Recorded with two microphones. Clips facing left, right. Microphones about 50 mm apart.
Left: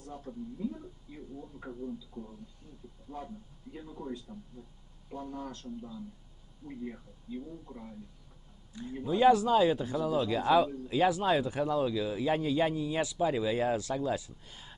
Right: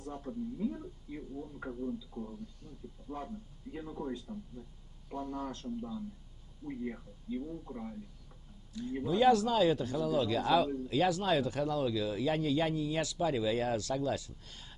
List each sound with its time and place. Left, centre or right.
0.1 s a man's voice: centre
5.4 s a man's voice: right
9.0 s a man's voice: centre